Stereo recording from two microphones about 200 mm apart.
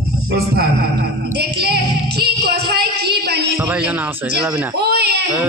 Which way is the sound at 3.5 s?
5° right (ahead or behind).